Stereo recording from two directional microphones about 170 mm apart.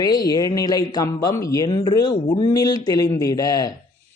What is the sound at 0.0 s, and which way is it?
Speech, 20° left (ahead or behind).